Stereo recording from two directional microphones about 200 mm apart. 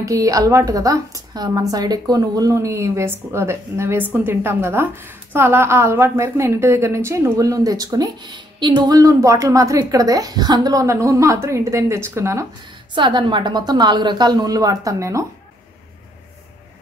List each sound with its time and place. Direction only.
0.0 s a woman's voice: 15° right (ahead or behind)